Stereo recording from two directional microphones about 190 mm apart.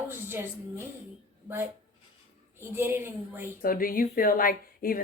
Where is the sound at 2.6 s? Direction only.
10° right (ahead or behind).